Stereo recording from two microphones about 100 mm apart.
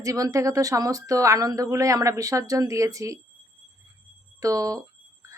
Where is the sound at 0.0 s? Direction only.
35° right (ahead or behind).